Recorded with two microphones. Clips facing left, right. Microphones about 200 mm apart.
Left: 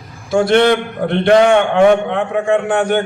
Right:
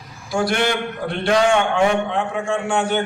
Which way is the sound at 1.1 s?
60° left (ahead or behind).